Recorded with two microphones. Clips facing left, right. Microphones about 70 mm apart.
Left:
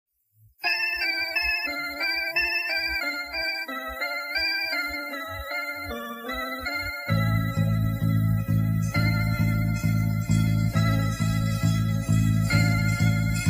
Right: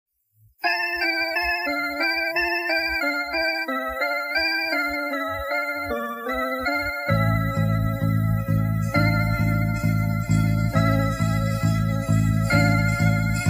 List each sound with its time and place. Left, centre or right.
6.7 s music: right
12.1 s music: right